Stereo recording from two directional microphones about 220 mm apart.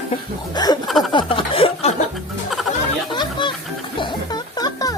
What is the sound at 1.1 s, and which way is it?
Speech, 25° left (ahead or behind).